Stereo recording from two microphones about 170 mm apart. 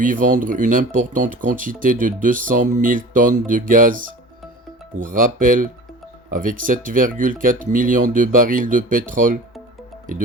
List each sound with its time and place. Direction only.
0.0 s speech: 50° right (ahead or behind)